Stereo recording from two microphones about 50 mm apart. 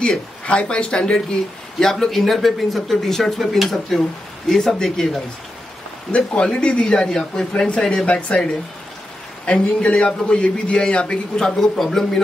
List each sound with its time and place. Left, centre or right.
0.5 s speech: centre
6.1 s speech: left
8.1 s speech: left
9.5 s speech: left; by 12.2 s centre